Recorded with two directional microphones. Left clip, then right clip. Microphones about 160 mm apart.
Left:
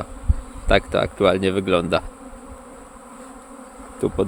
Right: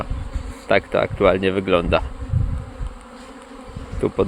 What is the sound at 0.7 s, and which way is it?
Speech, 35° left (ahead or behind).